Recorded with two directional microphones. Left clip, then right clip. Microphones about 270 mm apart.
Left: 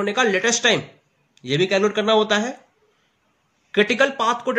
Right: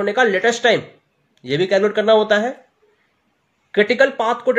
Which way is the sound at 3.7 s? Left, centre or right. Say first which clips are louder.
Right 3 dB; centre.